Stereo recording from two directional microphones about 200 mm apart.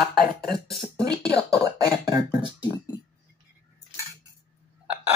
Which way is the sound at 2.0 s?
20° right (ahead or behind).